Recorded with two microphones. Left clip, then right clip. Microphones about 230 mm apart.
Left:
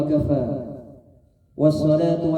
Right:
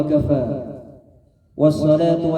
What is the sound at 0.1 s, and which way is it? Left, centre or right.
A man's voice, right.